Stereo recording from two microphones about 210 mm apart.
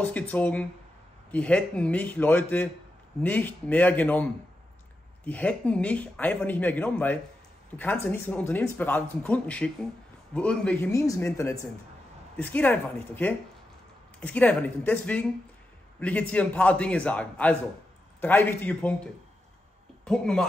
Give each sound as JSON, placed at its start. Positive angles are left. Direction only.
{"t": 0.0, "sound": "speech", "side_deg": 5}
{"t": 20.1, "sound": "speech", "side_deg": 5}